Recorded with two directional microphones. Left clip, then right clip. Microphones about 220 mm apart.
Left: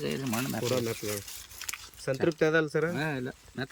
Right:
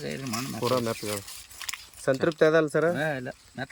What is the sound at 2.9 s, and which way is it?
Speech, 10° right (ahead or behind).